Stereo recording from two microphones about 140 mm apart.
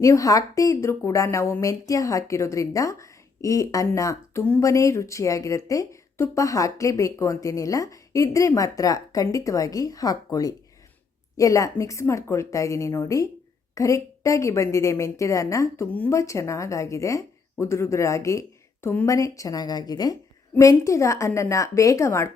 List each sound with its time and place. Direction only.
0.0 s a woman's voice: 25° left (ahead or behind)